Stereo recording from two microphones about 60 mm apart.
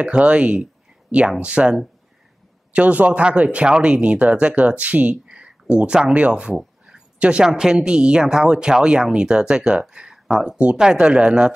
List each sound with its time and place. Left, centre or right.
0.0 s speech: right
6.5 s a sound: centre
7.2 s a woman's voice: centre